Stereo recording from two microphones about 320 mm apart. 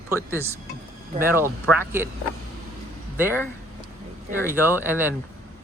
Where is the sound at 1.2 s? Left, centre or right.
Centre.